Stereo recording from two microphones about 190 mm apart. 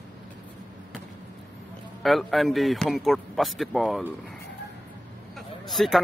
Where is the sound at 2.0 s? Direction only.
Centre (ahead or behind).